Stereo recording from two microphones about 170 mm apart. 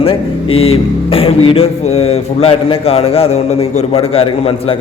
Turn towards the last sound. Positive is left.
turn(degrees=35)  # may be behind; listen again after turning